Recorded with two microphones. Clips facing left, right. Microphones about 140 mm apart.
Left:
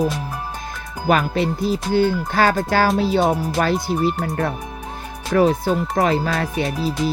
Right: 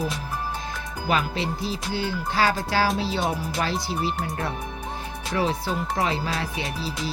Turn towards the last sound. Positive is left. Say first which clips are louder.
# left 9 dB
turn(degrees=50)  # may be behind; listen again after turning